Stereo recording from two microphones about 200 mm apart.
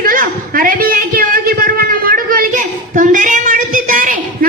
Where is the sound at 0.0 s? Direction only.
45° right (ahead or behind).